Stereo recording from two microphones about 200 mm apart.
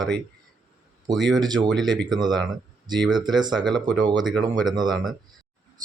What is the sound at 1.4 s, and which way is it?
Speech, 20° right (ahead or behind).